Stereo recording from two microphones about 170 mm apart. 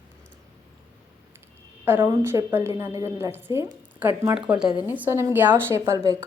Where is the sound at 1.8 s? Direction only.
15° right (ahead or behind).